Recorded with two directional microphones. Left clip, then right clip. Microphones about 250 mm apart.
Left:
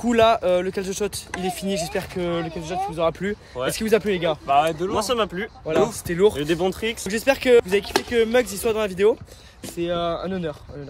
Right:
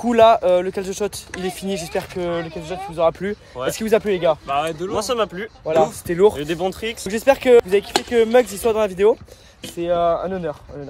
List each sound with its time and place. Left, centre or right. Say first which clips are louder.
0.0 s speech: right 5 dB; centre
4.5 s speech: left 3 dB; centre
6.0 s speech: right 3 dB; centre
6.3 s speech: even; centre
7.1 s speech: right 4 dB; centre